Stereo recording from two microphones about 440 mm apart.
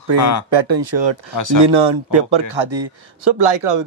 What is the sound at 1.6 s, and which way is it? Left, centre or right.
A man's voice, right.